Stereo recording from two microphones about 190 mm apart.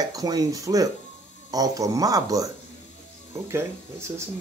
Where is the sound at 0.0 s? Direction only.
20° right (ahead or behind).